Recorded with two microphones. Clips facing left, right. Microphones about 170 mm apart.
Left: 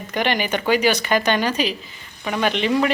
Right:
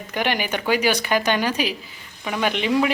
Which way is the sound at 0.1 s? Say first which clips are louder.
Left 2 dB; 10° right (ahead or behind).